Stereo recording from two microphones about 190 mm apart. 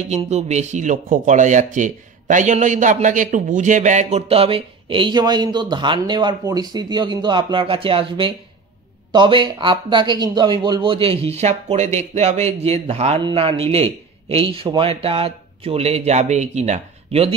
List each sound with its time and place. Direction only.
0.1 s speech: 35° right (ahead or behind)